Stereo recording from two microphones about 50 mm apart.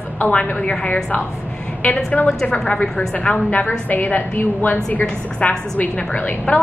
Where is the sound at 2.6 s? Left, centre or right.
Left.